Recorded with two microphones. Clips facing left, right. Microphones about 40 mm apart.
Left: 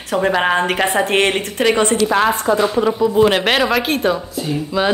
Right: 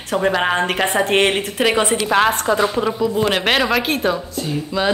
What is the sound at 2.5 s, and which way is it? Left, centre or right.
A woman's voice, centre.